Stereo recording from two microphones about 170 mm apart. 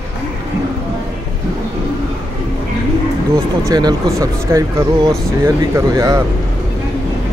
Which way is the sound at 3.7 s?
25° right (ahead or behind).